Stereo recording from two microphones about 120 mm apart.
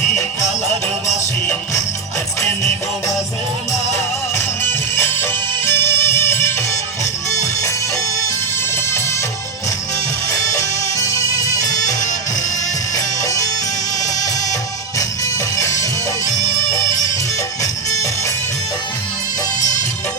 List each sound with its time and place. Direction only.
4.9 s music: 20° left (ahead or behind)
8.7 s music: 20° left (ahead or behind)
10.5 s music: 25° left (ahead or behind)
14.9 s music: 25° left (ahead or behind)
19.5 s music: 90° left